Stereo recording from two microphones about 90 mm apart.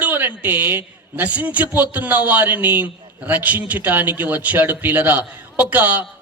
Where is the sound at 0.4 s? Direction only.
25° right (ahead or behind).